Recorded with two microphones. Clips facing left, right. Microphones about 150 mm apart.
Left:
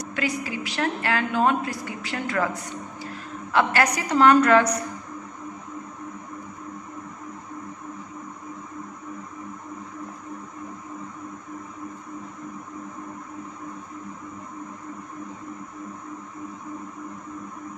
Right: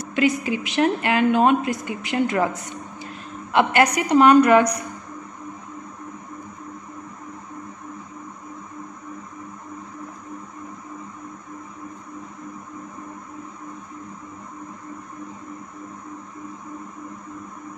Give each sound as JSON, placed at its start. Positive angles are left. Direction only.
{"t": 0.0, "sound": "a woman's voice", "side_deg": -20}